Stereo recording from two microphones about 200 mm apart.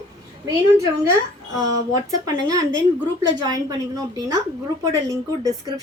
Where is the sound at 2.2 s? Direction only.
20° right (ahead or behind).